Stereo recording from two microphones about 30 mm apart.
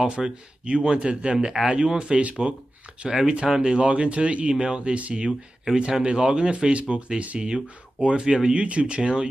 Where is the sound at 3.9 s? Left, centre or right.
Right.